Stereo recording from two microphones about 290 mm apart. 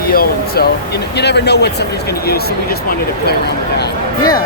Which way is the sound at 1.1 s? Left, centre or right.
Left.